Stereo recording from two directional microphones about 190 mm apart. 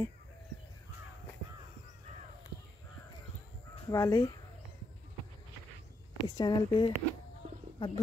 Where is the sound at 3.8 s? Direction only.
15° left (ahead or behind).